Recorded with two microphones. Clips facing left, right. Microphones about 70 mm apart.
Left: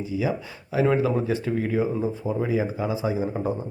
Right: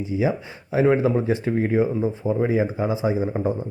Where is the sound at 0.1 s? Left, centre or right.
Right.